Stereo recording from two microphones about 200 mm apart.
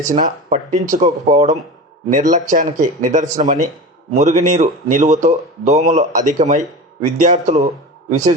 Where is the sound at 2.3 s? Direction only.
40° right (ahead or behind).